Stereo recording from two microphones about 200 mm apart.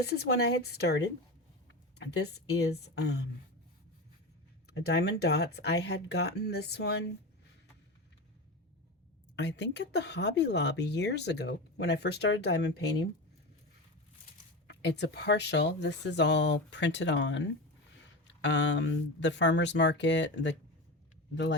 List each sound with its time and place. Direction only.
0.0 s speech: 55° left (ahead or behind)
4.7 s speech: 55° left (ahead or behind)
9.3 s speech: 60° left (ahead or behind)
14.7 s speech: 60° left (ahead or behind)